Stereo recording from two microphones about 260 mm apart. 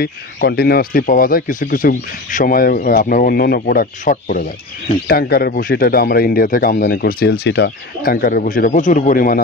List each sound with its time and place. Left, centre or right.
0.0 s speech: left